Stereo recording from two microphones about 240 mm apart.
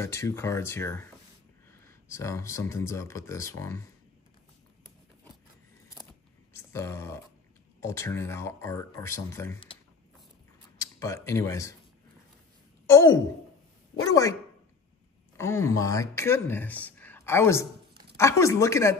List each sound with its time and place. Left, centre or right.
0.0 s speech: centre
6.5 s speech: centre
10.8 s speech: centre
12.8 s speech: centre
15.3 s speech: centre